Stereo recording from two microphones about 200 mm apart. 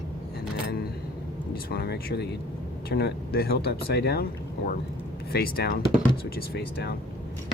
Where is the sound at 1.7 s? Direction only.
50° left (ahead or behind).